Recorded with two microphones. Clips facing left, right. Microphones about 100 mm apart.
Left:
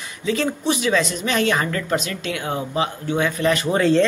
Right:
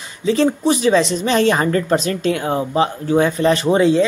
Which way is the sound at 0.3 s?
35° right (ahead or behind).